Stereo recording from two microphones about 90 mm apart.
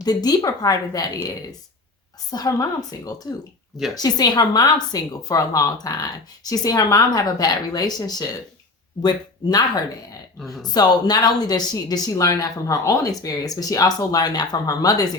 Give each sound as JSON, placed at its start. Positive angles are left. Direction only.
{"t": 0.0, "sound": "a woman's voice", "side_deg": 45}
{"t": 2.3, "sound": "a woman's voice", "side_deg": 45}
{"t": 10.4, "sound": "speech", "side_deg": 0}
{"t": 10.8, "sound": "a woman's voice", "side_deg": 50}